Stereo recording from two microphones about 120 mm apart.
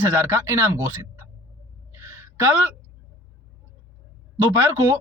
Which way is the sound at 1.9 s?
20° right (ahead or behind).